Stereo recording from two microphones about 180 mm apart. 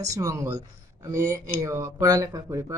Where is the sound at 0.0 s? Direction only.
20° right (ahead or behind).